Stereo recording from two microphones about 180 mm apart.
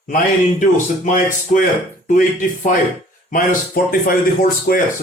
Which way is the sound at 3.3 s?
50° left (ahead or behind).